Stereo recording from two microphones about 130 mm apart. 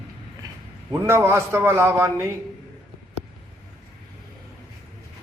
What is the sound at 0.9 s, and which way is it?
A man's voice, 20° right (ahead or behind).